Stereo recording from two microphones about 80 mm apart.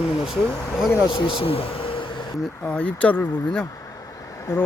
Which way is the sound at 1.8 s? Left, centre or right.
Left.